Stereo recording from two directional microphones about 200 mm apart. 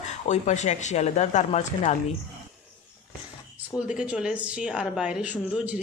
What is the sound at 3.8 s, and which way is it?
A woman's voice, 5° right (ahead or behind).